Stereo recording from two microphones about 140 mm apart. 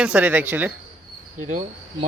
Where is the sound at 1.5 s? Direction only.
60° right (ahead or behind).